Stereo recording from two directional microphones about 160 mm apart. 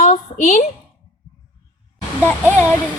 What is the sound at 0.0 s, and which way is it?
Speech, 50° left (ahead or behind).